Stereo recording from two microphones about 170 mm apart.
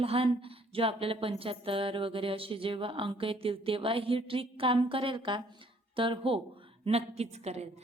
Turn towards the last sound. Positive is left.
turn(degrees=-40)  # may be behind; listen again after turning